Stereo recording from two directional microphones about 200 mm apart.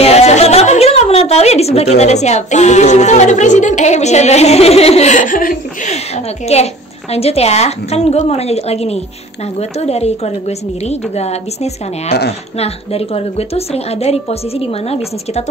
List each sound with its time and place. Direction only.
0.0 s a woman's voice: 30° left (ahead or behind)